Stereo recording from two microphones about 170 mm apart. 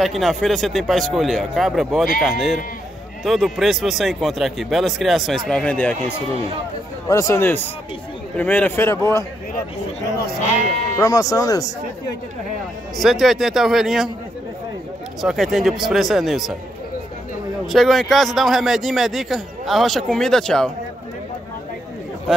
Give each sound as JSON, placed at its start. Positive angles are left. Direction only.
{"t": 0.0, "sound": "a man's voice", "side_deg": 0}
{"t": 7.1, "sound": "speech", "side_deg": 20}
{"t": 11.0, "sound": "speech", "side_deg": 20}
{"t": 12.9, "sound": "a man's voice", "side_deg": 0}
{"t": 15.2, "sound": "a man's voice", "side_deg": 0}
{"t": 17.6, "sound": "a man's voice", "side_deg": 0}